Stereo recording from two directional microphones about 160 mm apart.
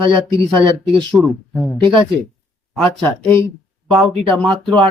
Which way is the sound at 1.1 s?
Centre (ahead or behind).